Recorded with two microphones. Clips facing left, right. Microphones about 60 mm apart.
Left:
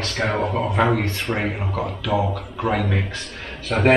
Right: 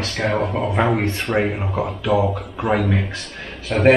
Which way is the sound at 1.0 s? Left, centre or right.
Right.